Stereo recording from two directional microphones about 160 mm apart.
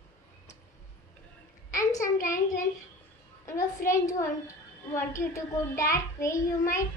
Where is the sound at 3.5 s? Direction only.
20° left (ahead or behind).